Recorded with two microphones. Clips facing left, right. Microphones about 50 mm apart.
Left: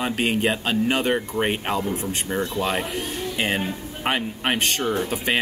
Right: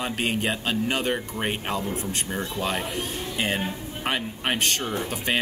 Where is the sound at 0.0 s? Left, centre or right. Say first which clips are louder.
Left 4 dB; centre.